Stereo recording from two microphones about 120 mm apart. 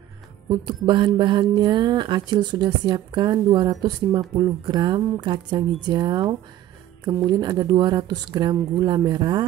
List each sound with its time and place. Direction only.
0.5 s speech: 40° right (ahead or behind)